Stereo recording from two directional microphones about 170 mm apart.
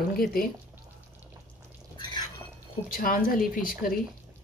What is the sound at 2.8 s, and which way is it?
A woman's voice, 55° left (ahead or behind).